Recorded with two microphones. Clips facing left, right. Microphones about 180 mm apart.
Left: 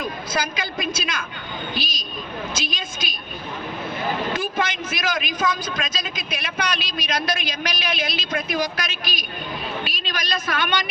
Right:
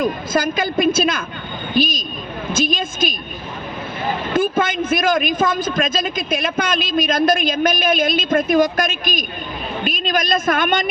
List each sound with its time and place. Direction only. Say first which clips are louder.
0.0 s a man's voice: right 8 dB; 50° right (ahead or behind)
4.4 s a man's voice: right 8 dB; 50° right (ahead or behind)